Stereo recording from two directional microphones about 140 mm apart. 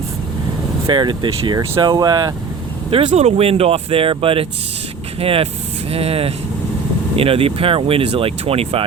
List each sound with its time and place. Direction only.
0.9 s speech: 35° right (ahead or behind)
3.1 s speech: 50° right (ahead or behind)